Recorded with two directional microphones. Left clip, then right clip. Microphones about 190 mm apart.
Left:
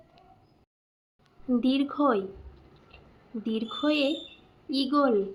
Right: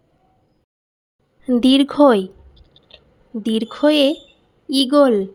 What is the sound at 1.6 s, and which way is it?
Speech, 55° right (ahead or behind).